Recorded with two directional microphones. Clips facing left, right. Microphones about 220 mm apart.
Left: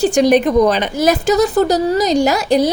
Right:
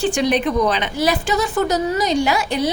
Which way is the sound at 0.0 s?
40° left (ahead or behind).